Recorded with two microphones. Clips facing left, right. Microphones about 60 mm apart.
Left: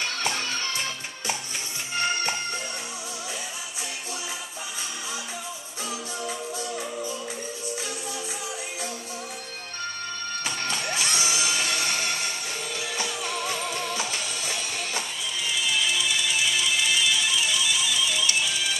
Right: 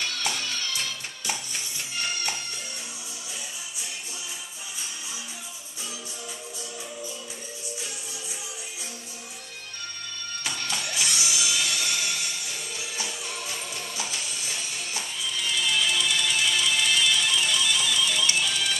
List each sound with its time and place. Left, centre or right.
0.0 s music: left
2.0 s music: left
10.6 s music: left
12.7 s music: left
13.9 s music: left
15.4 s music: centre